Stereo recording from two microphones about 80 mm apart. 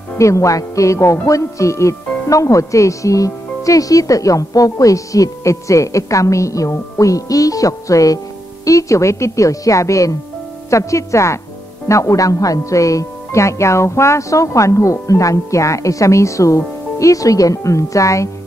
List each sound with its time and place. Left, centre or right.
0.2 s speech: left